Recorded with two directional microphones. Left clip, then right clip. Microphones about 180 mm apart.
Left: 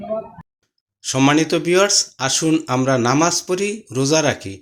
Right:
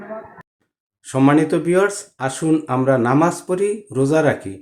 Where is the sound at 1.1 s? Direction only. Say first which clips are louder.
Right 1 dB; 15° left (ahead or behind).